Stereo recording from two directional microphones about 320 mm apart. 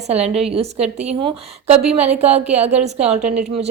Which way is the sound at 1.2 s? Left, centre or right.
Centre.